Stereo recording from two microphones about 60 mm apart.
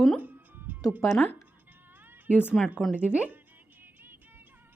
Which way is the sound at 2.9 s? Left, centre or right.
Right.